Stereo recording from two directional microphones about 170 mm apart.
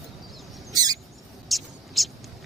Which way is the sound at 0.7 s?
20° right (ahead or behind).